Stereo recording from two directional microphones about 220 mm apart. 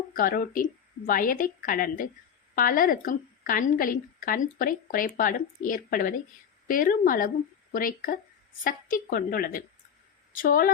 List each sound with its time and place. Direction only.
0.2 s a woman's voice: 40° left (ahead or behind)